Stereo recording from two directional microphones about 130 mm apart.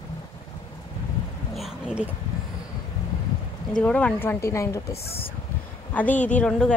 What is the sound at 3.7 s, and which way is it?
Speech, 10° left (ahead or behind).